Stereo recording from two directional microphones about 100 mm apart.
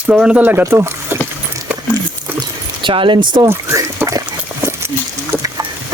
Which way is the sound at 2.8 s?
55° right (ahead or behind).